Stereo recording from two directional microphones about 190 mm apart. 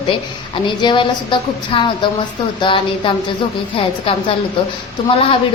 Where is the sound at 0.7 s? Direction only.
25° left (ahead or behind).